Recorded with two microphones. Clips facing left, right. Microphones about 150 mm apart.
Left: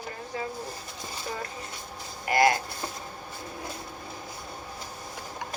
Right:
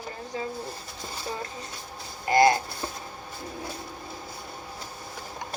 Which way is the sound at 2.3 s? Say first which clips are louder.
Right 3 dB; 25° right (ahead or behind).